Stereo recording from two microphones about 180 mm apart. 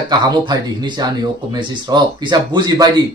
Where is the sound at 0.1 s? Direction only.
25° right (ahead or behind).